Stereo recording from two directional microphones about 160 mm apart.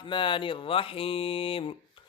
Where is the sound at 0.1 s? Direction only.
30° left (ahead or behind).